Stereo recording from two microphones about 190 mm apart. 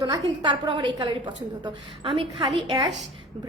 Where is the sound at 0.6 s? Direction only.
25° right (ahead or behind).